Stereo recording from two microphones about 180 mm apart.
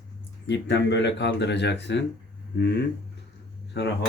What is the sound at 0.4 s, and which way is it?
Speech, 75° left (ahead or behind).